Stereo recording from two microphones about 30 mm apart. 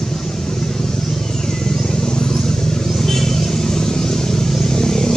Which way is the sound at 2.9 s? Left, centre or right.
Centre.